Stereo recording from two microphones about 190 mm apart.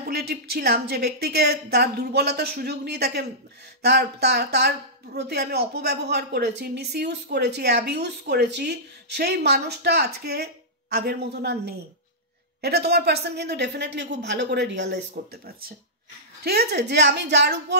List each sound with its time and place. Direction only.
0.1 s speech: 55° right (ahead or behind)